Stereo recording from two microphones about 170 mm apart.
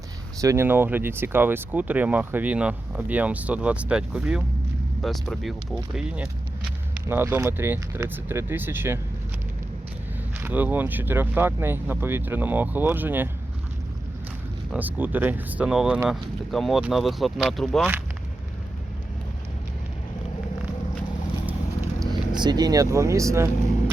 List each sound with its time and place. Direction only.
0.4 s speech: 15° right (ahead or behind)
10.4 s speech: 10° right (ahead or behind)
14.7 s speech: 10° right (ahead or behind)
22.4 s speech: 25° right (ahead or behind)